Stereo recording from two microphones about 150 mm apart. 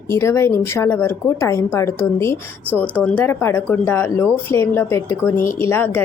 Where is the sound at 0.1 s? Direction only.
15° left (ahead or behind).